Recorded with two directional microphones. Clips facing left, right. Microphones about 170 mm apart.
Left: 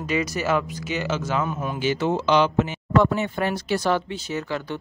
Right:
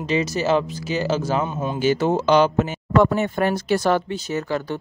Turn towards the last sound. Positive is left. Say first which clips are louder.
# right 4 dB
turn(degrees=-45)  # may be behind; listen again after turning